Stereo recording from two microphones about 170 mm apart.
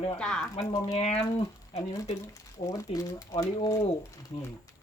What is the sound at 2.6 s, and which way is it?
Speech, 20° left (ahead or behind).